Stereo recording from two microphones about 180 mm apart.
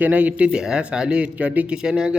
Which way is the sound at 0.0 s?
10° right (ahead or behind).